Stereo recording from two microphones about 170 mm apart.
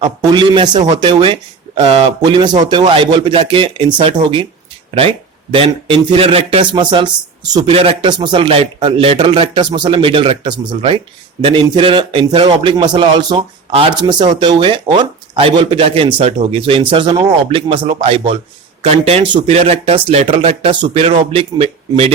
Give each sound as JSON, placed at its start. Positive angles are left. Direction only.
{"t": 0.0, "sound": "speech", "side_deg": -25}